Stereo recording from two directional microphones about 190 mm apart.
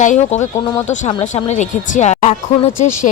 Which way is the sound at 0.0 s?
40° left (ahead or behind).